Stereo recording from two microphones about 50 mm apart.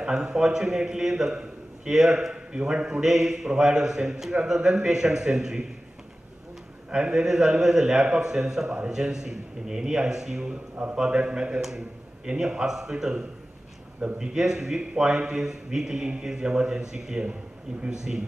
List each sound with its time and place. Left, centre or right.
0.0 s a man's voice: centre
6.9 s a man's voice: centre